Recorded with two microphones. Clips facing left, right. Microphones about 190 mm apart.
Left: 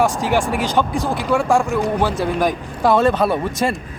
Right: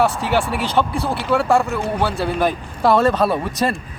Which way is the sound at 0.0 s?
15° left (ahead or behind).